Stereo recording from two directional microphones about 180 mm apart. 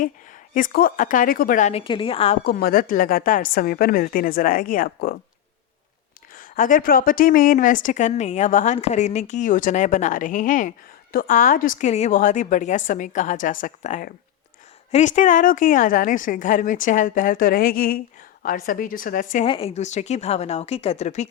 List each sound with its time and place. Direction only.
0.5 s a woman's voice: 50° left (ahead or behind)
1.8 s a woman's voice: 30° left (ahead or behind)
2.4 s a woman's voice: 60° left (ahead or behind)
6.3 s a woman's voice: 50° left (ahead or behind)
19.5 s speech: 30° left (ahead or behind)